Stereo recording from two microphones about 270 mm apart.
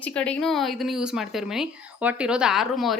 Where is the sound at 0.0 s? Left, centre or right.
Centre.